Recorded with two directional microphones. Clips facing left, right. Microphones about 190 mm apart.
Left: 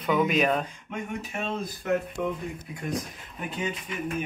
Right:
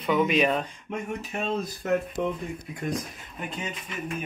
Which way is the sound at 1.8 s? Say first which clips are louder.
Right 1 dB; 40° right (ahead or behind).